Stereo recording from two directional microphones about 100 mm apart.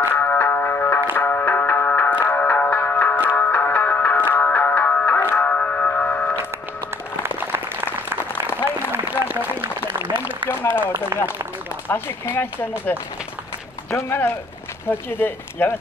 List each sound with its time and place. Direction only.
0.1 s music: 20° left (ahead or behind)
7.2 s applause: 20° right (ahead or behind)
9.8 s a sound: 50° right (ahead or behind)
10.5 s a sound: 20° left (ahead or behind)
11.1 s speech: 35° right (ahead or behind)
11.9 s speech: 20° left (ahead or behind)